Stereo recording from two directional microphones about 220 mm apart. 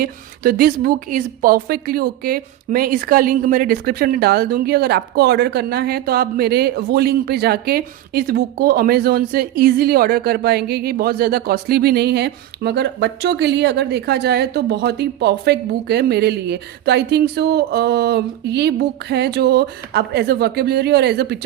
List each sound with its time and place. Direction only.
0.0 s a woman's voice: 45° right (ahead or behind)